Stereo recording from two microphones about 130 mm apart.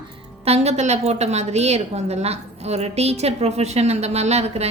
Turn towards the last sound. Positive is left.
turn(degrees=-55)  # may be behind; listen again after turning